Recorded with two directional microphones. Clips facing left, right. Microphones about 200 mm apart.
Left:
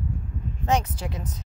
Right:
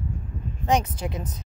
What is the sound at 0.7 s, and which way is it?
Speech, 15° right (ahead or behind).